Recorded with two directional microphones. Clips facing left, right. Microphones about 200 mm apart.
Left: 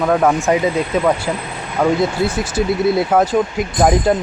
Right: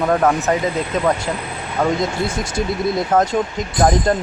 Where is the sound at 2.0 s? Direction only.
5° left (ahead or behind).